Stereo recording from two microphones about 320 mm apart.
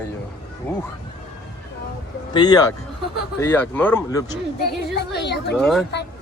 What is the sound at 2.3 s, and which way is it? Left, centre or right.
Speech, centre.